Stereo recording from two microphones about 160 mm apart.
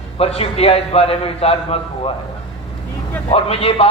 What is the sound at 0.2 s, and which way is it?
A woman's voice, 40° left (ahead or behind).